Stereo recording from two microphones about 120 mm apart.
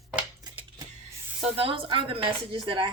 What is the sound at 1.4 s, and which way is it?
A woman's voice, 50° right (ahead or behind).